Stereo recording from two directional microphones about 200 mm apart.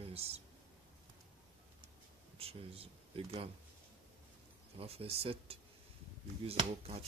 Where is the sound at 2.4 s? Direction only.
30° right (ahead or behind).